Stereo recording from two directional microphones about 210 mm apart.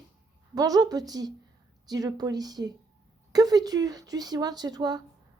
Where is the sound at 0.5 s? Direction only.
20° right (ahead or behind).